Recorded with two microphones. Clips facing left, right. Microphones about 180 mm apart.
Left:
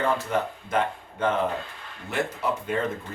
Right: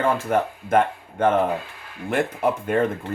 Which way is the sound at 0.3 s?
50° right (ahead or behind).